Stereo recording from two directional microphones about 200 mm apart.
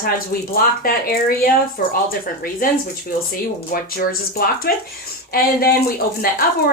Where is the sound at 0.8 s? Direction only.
45° left (ahead or behind).